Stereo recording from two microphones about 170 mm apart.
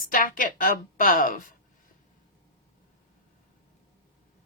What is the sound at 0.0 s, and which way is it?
A woman's voice, 55° left (ahead or behind).